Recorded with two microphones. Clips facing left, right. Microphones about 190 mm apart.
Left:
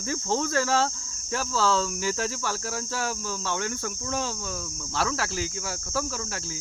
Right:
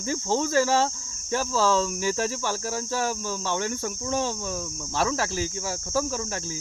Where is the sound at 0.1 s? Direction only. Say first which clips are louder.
Right 2 dB; 15° right (ahead or behind).